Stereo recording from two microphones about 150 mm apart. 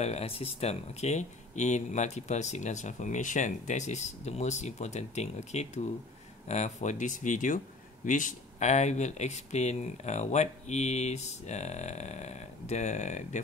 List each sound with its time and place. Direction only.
0.0 s speech: 45° left (ahead or behind)